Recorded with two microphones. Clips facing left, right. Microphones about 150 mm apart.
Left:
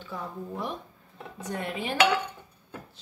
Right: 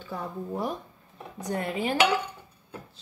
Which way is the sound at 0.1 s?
35° right (ahead or behind).